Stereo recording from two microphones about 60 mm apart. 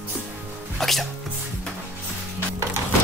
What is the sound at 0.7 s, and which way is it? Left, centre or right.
Music, centre.